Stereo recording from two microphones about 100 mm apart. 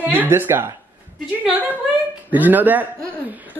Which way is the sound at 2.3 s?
15° right (ahead or behind).